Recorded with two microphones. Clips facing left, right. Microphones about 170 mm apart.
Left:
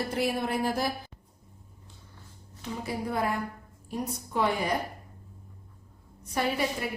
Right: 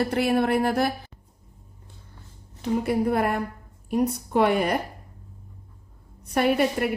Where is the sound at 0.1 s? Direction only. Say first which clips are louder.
Right 7 dB; 65° right (ahead or behind).